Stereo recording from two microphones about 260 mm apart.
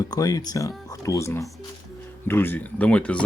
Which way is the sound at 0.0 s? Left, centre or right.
Centre.